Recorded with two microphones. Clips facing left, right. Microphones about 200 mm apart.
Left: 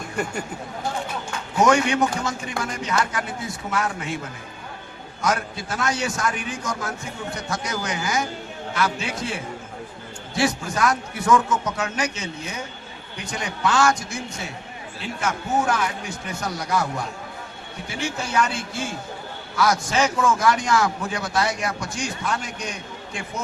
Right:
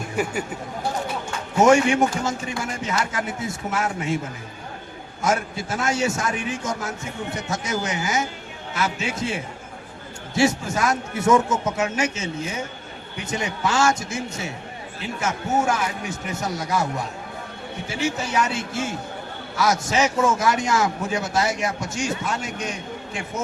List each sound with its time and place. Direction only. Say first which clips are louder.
0.2 s speech: right 2 dB; 5° right (ahead or behind)
1.5 s a man's voice: right 3 dB; 25° right (ahead or behind)
5.2 s a man's voice: right 1 dB; 25° right (ahead or behind)
10.3 s a man's voice: right 3 dB; 25° right (ahead or behind)
18.0 s a man's voice: right 1 dB; 20° right (ahead or behind)